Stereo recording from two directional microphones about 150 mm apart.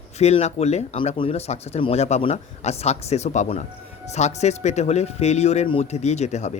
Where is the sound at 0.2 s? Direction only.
45° left (ahead or behind).